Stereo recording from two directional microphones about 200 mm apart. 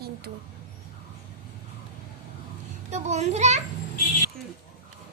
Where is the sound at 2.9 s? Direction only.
35° right (ahead or behind).